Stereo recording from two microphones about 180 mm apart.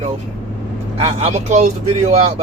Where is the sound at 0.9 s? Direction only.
35° right (ahead or behind).